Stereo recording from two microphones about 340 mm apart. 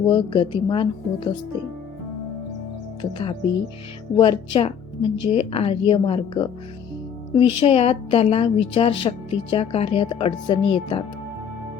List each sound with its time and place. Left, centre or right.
0.0 s a woman's voice: centre
3.0 s a woman's voice: centre